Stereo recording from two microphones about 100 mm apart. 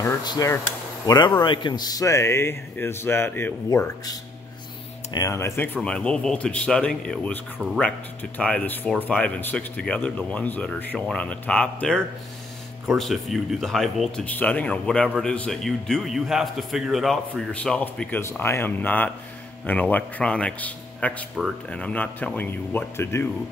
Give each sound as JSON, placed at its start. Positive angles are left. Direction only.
{"t": 0.2, "sound": "a man's voice", "side_deg": 45}
{"t": 3.7, "sound": "speech", "side_deg": 35}
{"t": 5.8, "sound": "a man's voice", "side_deg": 10}
{"t": 14.2, "sound": "a man's voice", "side_deg": 15}
{"t": 17.5, "sound": "speech", "side_deg": 10}